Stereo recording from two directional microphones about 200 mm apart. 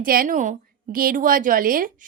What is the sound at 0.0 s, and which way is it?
A woman's voice, 45° right (ahead or behind).